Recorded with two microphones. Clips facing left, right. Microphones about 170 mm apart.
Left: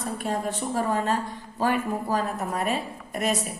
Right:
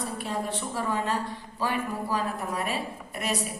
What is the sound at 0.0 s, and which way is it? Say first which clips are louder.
A woman's voice: left 3 dB; 45° left (ahead or behind).